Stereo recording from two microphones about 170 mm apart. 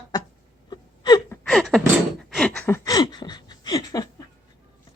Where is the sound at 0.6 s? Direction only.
25° left (ahead or behind).